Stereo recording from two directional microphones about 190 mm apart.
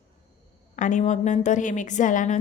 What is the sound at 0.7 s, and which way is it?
A woman's voice, 40° left (ahead or behind).